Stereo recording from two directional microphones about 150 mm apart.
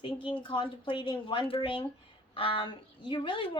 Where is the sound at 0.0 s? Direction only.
35° left (ahead or behind).